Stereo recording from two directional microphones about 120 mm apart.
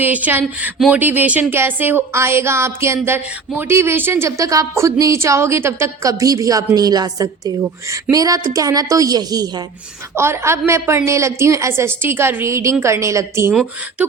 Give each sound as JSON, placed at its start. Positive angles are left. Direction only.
{"t": 0.0, "sound": "speech", "side_deg": -15}
{"t": 10.2, "sound": "speech", "side_deg": -20}